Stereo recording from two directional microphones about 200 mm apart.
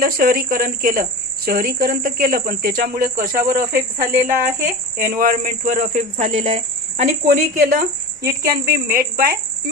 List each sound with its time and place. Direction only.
0.0 s speech: 45° right (ahead or behind)